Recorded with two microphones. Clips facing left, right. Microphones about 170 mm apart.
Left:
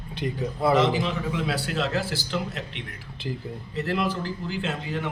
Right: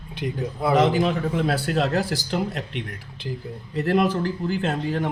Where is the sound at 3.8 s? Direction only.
50° right (ahead or behind).